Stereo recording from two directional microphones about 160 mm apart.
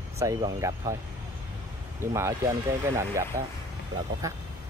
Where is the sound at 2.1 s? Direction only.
15° right (ahead or behind).